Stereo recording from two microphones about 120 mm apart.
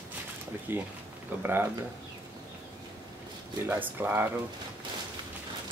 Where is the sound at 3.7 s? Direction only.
15° right (ahead or behind).